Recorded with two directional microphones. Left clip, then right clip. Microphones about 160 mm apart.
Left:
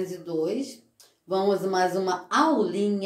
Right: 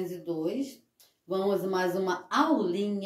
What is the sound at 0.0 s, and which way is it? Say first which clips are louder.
Speech: left 4 dB; 20° right (ahead or behind).